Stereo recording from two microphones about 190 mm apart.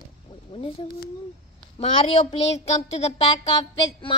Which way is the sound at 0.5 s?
30° left (ahead or behind).